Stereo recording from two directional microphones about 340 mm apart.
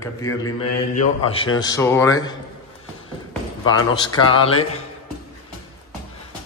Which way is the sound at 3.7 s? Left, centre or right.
Centre.